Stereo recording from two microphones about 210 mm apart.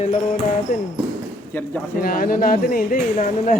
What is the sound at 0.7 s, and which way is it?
Speech, 45° left (ahead or behind).